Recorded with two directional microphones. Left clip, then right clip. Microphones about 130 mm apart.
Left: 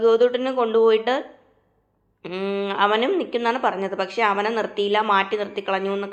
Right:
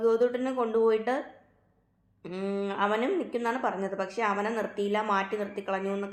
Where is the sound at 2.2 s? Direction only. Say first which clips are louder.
Left 7 dB; 20° left (ahead or behind).